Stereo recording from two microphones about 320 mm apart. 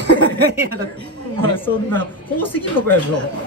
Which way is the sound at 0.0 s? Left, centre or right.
Right.